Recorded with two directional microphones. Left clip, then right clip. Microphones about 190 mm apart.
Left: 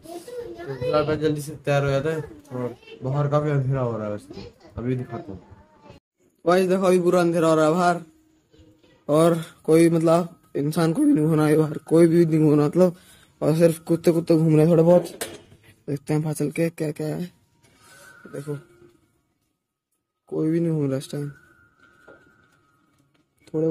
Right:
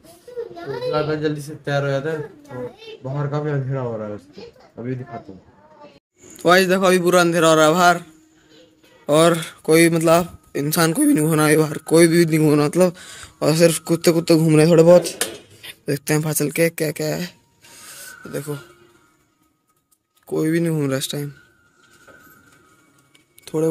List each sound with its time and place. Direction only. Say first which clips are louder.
0.9 s mantra: left 1 dB; 10° left (ahead or behind)
6.4 s speech: right 5 dB; 5° right (ahead or behind)
9.0 s speech: right 4 dB; centre (ahead or behind)
20.2 s speech: right 3 dB; centre (ahead or behind)